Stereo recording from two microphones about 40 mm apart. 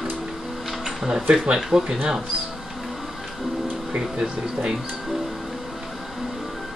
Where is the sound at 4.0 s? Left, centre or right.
Centre.